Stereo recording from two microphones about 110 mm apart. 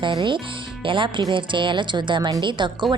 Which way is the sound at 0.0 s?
45° right (ahead or behind).